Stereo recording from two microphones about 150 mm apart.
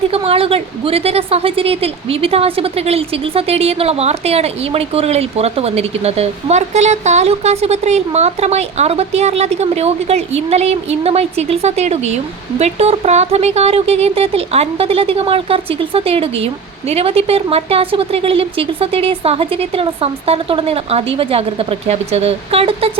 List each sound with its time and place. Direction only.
0.1 s a woman's voice: 40° right (ahead or behind)